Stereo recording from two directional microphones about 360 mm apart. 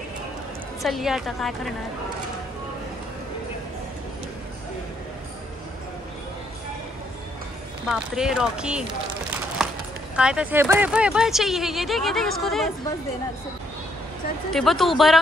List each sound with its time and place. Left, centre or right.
0.8 s speech: centre
7.9 s speech: centre
10.1 s speech: centre
14.5 s speech: centre